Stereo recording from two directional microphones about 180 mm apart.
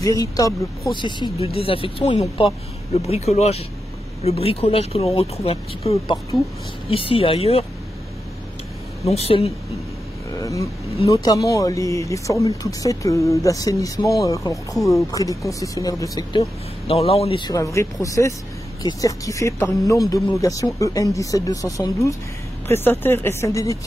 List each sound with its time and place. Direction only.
0.0 s speech: 20° left (ahead or behind)
9.1 s speech: 35° left (ahead or behind)
10.4 s speech: 20° left (ahead or behind)